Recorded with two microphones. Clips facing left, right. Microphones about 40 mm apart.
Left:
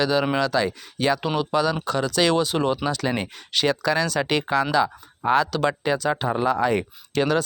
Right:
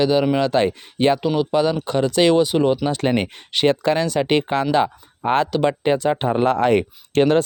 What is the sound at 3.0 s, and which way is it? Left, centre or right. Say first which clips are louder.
Speech: right 5 dB; right.